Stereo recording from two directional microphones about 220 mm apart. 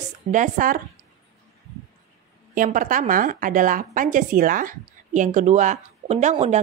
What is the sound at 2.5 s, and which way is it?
A woman's voice, 40° right (ahead or behind).